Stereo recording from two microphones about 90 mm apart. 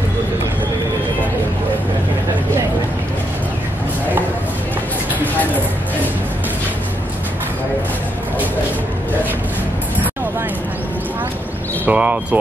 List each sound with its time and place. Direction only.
11.8 s speech: 15° right (ahead or behind)